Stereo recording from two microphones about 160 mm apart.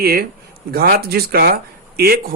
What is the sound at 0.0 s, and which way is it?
Speech, 70° right (ahead or behind).